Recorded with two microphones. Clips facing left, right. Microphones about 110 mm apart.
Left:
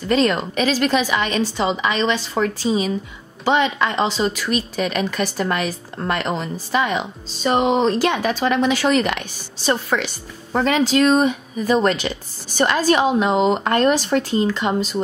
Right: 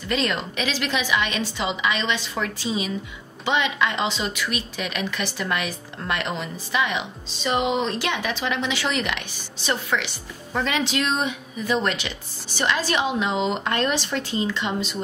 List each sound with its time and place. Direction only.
0.1 s a woman's voice: 40° left (ahead or behind)